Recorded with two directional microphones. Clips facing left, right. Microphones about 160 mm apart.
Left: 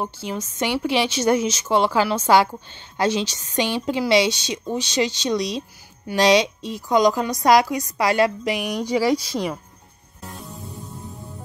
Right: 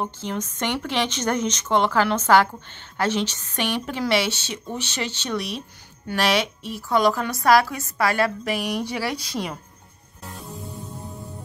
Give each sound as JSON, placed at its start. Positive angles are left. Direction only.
{"t": 0.0, "sound": "a woman's voice", "side_deg": 10}